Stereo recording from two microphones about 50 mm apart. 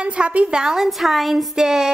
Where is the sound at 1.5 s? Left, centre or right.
Centre.